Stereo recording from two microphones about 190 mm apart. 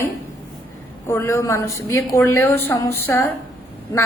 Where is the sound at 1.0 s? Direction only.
15° left (ahead or behind).